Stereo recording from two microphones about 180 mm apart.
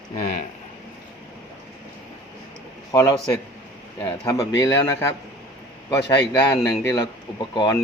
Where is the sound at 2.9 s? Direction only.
20° left (ahead or behind).